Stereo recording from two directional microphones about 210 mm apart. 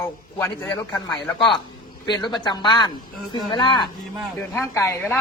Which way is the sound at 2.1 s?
20° left (ahead or behind).